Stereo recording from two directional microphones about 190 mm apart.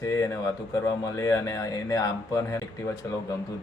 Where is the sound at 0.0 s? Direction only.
15° left (ahead or behind).